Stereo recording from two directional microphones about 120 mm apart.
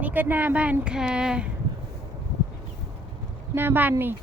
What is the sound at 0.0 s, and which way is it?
Speech, 15° right (ahead or behind).